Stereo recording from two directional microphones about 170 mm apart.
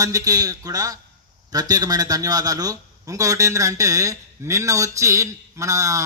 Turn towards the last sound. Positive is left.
turn(degrees=-20)  # may be behind; listen again after turning